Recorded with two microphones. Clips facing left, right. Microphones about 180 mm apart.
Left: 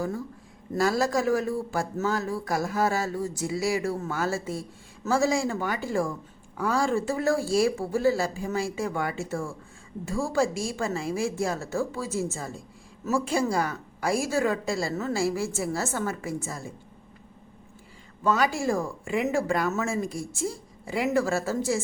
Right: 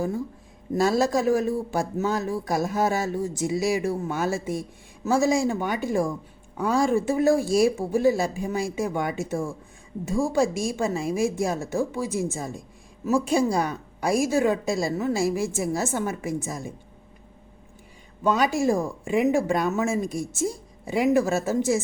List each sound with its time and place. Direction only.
0.7 s a woman's voice: 25° right (ahead or behind)
18.2 s speech: 20° right (ahead or behind)